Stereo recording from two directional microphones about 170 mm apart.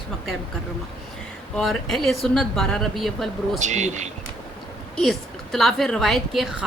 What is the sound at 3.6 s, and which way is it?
Speech, 45° right (ahead or behind).